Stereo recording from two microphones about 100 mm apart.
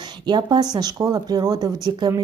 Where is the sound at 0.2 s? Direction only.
45° right (ahead or behind).